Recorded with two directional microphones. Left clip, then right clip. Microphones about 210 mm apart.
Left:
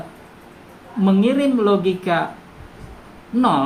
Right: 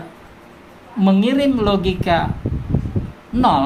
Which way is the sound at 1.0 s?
45° right (ahead or behind).